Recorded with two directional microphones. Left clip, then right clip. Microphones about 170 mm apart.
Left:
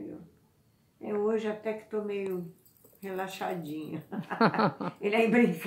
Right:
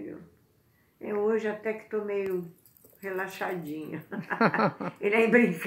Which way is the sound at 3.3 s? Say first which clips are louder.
Right 2 dB; 25° left (ahead or behind).